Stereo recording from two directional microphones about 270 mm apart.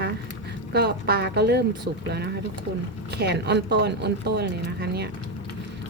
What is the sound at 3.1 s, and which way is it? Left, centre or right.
A woman's voice, right.